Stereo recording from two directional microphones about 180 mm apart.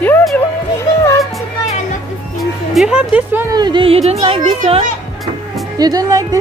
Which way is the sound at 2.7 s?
5° right (ahead or behind).